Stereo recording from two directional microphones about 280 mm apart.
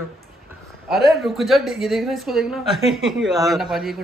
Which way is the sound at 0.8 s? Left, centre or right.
Centre.